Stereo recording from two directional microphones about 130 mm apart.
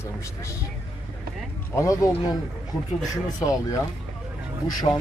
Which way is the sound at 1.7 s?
25° left (ahead or behind).